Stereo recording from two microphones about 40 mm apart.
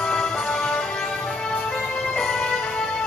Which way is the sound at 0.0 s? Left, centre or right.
Centre.